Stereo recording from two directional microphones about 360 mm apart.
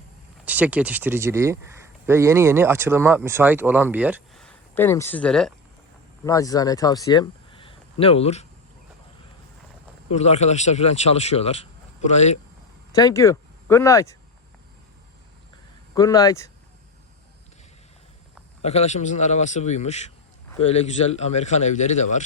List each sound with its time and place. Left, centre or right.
0.4 s speech: centre
10.1 s a man's voice: centre
16.0 s a man's voice: centre
18.6 s a man's voice: centre